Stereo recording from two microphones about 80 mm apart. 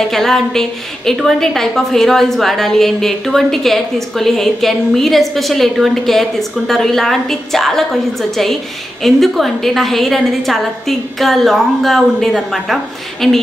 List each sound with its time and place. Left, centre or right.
0.1 s a woman's voice: centre